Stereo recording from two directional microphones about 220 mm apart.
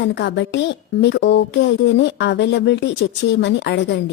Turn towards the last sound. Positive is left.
turn(degrees=55)  # may be behind; listen again after turning